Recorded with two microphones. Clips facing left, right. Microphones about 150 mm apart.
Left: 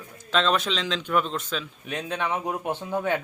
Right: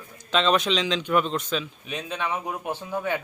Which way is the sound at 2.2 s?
15° left (ahead or behind).